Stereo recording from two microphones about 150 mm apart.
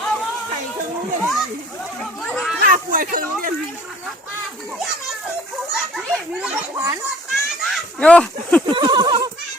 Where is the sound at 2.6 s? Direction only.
65° right (ahead or behind).